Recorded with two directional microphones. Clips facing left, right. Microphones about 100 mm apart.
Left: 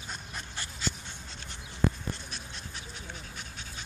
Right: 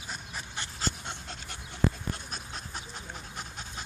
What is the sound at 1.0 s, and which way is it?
Dog, 75° right (ahead or behind).